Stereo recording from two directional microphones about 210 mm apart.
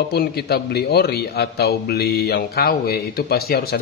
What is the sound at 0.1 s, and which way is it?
A man's voice, 50° left (ahead or behind).